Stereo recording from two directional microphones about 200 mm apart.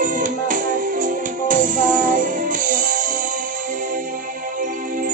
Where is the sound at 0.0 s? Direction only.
40° right (ahead or behind).